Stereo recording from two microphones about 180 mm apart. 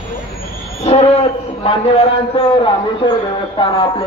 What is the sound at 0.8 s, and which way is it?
A man's voice, 35° left (ahead or behind).